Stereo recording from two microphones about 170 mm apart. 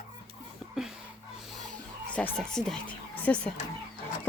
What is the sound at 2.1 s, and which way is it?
Speech, 5° left (ahead or behind).